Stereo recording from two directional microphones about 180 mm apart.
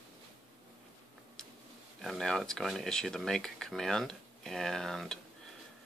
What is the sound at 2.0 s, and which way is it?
Speech, centre (ahead or behind).